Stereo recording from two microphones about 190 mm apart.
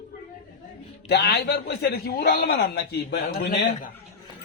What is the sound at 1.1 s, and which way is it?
A man's voice, 60° left (ahead or behind).